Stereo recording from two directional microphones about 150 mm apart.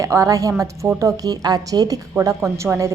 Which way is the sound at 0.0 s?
20° right (ahead or behind).